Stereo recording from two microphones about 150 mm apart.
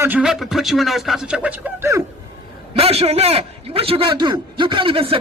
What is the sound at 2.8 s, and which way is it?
A man's voice, 40° right (ahead or behind).